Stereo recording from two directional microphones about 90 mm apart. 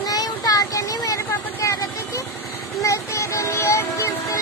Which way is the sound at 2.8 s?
35° left (ahead or behind).